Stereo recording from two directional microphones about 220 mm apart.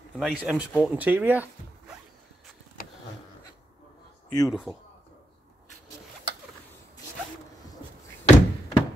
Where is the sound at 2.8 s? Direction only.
40° left (ahead or behind).